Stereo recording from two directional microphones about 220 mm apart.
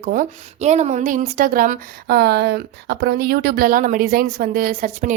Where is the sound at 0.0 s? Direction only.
40° right (ahead or behind).